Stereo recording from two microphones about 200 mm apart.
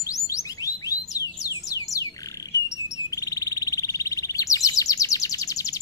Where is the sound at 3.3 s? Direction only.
15° left (ahead or behind).